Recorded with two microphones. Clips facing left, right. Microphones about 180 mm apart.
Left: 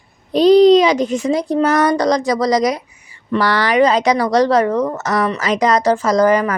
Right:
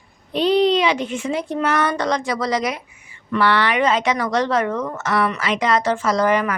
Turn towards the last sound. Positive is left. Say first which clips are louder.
# left 5 dB
turn(degrees=40)  # may be behind; listen again after turning